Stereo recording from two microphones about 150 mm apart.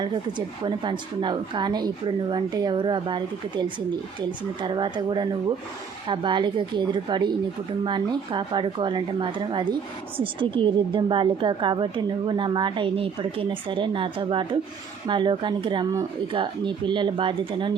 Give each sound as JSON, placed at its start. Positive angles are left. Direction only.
{"t": 0.0, "sound": "a woman's voice", "side_deg": -30}